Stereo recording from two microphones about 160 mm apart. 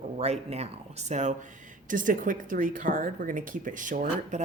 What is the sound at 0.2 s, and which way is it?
A woman's voice, 40° right (ahead or behind).